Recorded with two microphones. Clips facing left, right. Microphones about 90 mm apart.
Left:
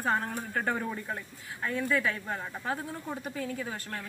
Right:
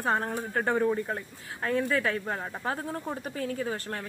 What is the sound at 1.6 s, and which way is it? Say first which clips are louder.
Speech: right 2 dB; 40° right (ahead or behind).